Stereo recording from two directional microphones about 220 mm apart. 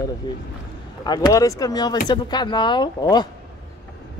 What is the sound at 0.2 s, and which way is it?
Speech, 20° left (ahead or behind).